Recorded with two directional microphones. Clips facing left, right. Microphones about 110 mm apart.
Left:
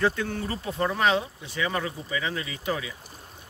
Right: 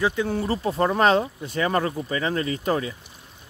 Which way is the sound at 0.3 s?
35° right (ahead or behind).